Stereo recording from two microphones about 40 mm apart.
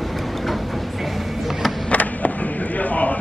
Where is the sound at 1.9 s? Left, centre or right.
Left.